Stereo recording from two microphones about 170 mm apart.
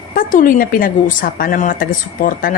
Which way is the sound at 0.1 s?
50° left (ahead or behind).